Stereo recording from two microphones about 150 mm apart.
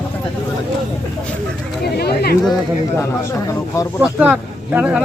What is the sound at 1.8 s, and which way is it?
Speech, 90° left.